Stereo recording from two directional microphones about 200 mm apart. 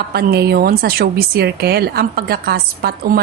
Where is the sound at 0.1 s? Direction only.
50° right (ahead or behind).